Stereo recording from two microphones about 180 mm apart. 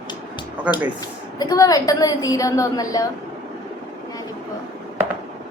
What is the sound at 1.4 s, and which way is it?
A woman's voice, 20° left (ahead or behind).